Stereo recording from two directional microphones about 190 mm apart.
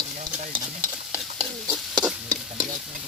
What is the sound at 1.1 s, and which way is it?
Speech, centre (ahead or behind).